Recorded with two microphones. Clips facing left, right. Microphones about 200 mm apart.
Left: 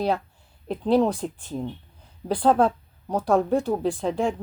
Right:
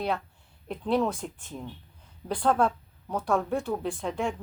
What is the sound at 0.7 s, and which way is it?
A woman's voice, 35° left (ahead or behind).